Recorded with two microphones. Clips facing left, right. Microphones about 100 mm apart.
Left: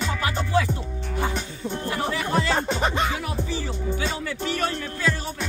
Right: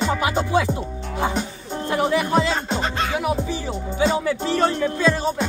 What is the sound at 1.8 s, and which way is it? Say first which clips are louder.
Music: right 8 dB; 20° right (ahead or behind).